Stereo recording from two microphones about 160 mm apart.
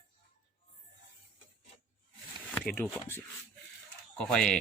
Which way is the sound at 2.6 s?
10° left (ahead or behind).